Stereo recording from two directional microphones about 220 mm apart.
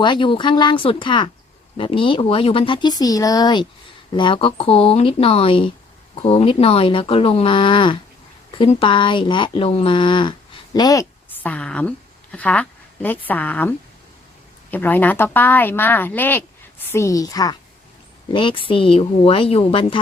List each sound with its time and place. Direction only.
0.0 s a woman's voice: 20° left (ahead or behind)
11.4 s a woman's voice: 5° left (ahead or behind); by 20.0 s 25° left (ahead or behind)